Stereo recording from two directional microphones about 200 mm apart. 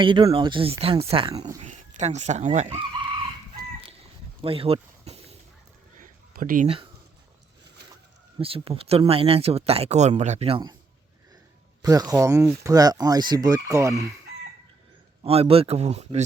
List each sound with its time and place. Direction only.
0.0 s speech: 25° right (ahead or behind)
4.4 s a sound: 30° right (ahead or behind)
6.0 s a sound: 45° right (ahead or behind)
8.4 s speech: 30° right (ahead or behind)
11.8 s speech: 20° right (ahead or behind)
15.2 s speech: 30° right (ahead or behind)